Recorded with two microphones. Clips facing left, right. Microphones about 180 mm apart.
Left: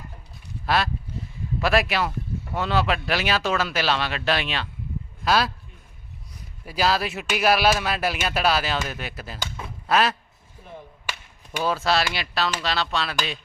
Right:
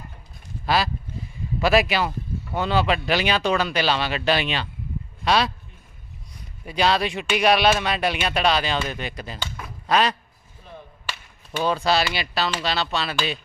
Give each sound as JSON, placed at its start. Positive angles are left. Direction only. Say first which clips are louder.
{"t": 0.6, "sound": "speech", "louder": "right 1 dB", "side_deg": 0}
{"t": 6.7, "sound": "speech", "louder": "right 2 dB", "side_deg": 5}
{"t": 11.5, "sound": "speech", "louder": "right 2 dB", "side_deg": 5}